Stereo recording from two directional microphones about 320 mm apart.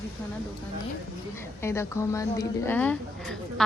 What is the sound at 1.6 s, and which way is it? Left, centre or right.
A woman's voice, centre.